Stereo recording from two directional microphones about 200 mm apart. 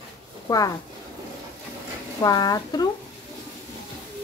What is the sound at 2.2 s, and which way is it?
Speech, 20° left (ahead or behind).